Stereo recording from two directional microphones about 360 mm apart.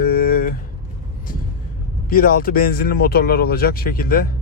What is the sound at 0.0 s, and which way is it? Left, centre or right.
Vehicle, left.